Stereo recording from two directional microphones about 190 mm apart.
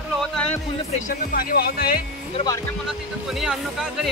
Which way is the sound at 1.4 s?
50° left (ahead or behind).